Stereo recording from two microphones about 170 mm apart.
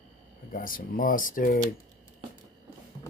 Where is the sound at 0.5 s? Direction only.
55° left (ahead or behind).